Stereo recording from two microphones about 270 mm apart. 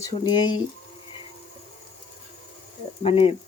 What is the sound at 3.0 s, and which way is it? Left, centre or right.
Speech, left.